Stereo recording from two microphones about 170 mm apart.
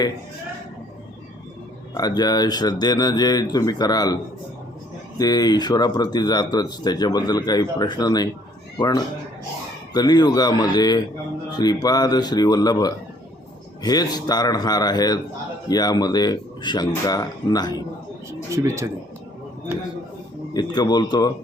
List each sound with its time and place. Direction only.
2.0 s speech: 25° left (ahead or behind)
18.3 s speech: 15° right (ahead or behind)
20.5 s speech: 25° left (ahead or behind)